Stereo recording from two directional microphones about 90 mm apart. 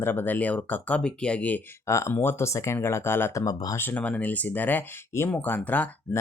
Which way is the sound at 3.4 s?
45° left (ahead or behind).